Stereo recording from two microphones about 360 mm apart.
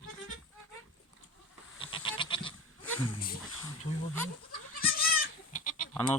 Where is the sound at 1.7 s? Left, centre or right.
Centre.